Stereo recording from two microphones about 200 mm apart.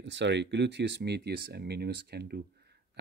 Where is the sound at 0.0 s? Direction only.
60° right (ahead or behind).